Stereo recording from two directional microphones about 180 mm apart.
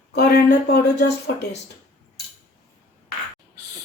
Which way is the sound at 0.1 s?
60° left (ahead or behind).